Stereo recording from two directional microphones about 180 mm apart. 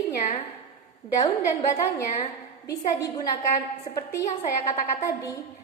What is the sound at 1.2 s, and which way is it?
A woman's voice, 20° left (ahead or behind).